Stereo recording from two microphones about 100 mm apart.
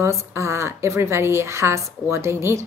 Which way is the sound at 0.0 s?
30° right (ahead or behind).